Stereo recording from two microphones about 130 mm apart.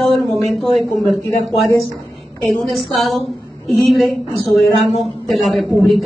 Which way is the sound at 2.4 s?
Centre (ahead or behind).